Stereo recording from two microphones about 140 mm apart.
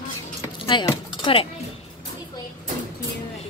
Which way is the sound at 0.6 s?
35° left (ahead or behind).